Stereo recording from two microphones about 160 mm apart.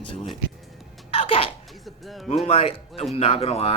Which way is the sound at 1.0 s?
35° left (ahead or behind).